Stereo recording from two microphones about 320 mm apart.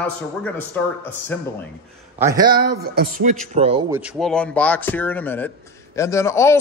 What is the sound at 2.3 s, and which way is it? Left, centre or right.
Speech, right.